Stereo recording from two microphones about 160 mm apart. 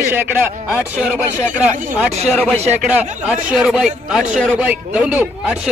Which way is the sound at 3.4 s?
5° right (ahead or behind).